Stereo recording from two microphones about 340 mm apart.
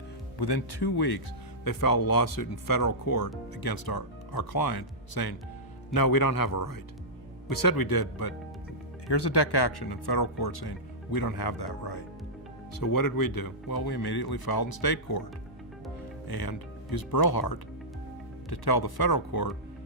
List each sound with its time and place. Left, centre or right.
0.8 s speech: left
1.6 s speech: left
9.6 s speech: left
12.7 s speech: left
16.2 s speech: left